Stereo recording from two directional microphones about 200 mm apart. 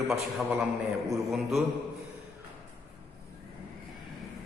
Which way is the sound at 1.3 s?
Centre (ahead or behind).